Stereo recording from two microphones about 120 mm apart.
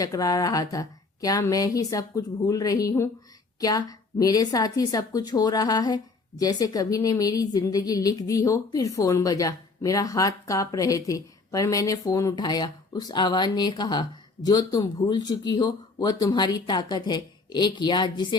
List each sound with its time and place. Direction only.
0.0 s a woman's voice: 30° left (ahead or behind)